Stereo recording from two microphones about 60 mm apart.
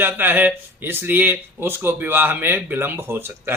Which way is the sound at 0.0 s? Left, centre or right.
Right.